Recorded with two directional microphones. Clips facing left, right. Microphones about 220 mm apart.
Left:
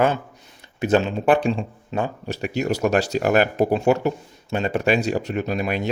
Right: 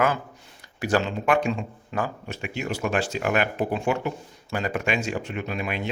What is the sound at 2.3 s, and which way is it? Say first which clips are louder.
Speech: left 7 dB; 40° left (ahead or behind).